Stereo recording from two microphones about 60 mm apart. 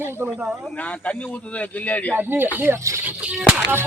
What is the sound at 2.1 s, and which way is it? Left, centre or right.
Speech, right.